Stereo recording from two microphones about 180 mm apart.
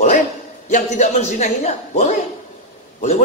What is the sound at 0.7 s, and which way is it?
A man's voice, 40° left (ahead or behind).